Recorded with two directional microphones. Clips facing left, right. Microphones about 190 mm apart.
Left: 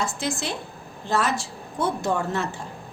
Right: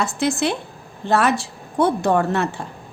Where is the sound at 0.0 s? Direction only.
65° right (ahead or behind).